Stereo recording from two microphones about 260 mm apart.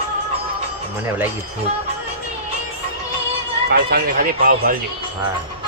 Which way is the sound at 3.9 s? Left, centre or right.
Right.